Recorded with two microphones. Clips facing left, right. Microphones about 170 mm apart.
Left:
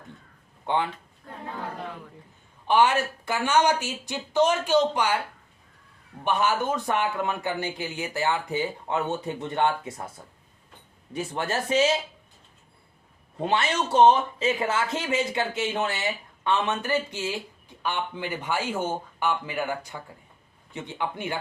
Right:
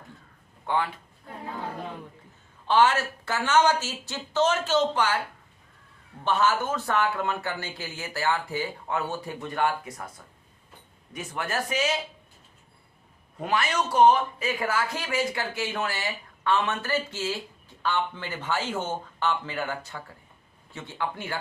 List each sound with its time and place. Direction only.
0.6 s speech: 20° left (ahead or behind)
2.6 s speech: 15° left (ahead or behind)
6.2 s speech: 15° left (ahead or behind)
11.1 s speech: 30° left (ahead or behind)
13.4 s speech: 25° left (ahead or behind)